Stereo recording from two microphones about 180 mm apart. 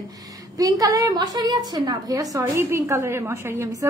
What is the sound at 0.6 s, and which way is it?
A woman's voice, 20° right (ahead or behind).